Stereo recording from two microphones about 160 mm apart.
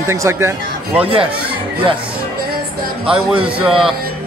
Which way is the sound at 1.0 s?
35° right (ahead or behind).